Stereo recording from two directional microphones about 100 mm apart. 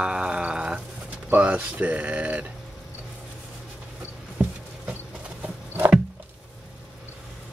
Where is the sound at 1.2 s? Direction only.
15° right (ahead or behind).